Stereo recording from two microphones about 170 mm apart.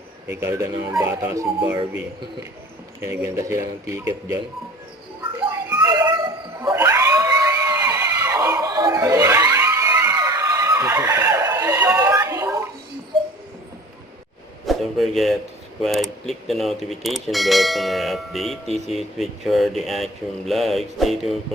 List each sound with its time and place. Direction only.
0.4 s speech: 20° right (ahead or behind)
3.0 s speech: 15° right (ahead or behind)
5.5 s a sound: 15° right (ahead or behind)
6.6 s screaming: 20° right (ahead or behind)
14.7 s speech: centre (ahead or behind)